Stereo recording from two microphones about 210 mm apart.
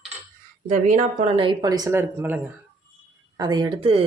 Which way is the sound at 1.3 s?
25° right (ahead or behind).